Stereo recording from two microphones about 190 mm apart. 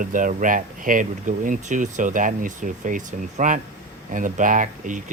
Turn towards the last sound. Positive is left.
turn(degrees=-40)  # may be behind; listen again after turning